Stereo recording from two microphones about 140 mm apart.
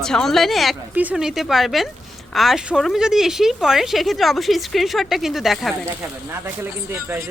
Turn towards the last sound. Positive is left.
turn(degrees=-15)  # may be behind; listen again after turning